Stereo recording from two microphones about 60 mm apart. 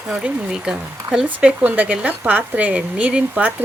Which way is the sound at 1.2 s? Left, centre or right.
Right.